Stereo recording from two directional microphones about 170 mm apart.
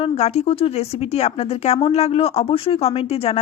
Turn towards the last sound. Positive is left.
turn(degrees=35)  # may be behind; listen again after turning